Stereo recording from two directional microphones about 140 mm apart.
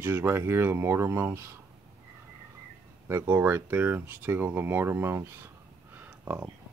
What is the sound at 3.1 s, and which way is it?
Speech, 15° right (ahead or behind).